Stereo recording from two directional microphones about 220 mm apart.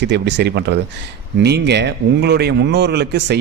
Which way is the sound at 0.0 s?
55° right (ahead or behind).